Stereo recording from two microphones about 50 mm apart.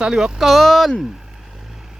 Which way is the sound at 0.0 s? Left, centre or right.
Centre.